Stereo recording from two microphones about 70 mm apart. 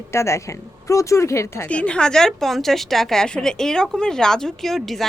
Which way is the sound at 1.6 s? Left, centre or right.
Centre.